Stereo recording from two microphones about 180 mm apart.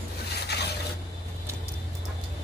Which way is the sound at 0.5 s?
65° left (ahead or behind).